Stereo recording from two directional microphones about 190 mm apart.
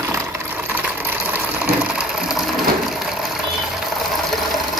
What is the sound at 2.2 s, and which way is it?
Crushing, centre (ahead or behind).